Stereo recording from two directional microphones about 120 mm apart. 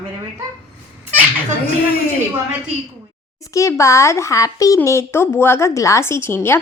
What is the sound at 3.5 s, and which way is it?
Speech, 25° left (ahead or behind).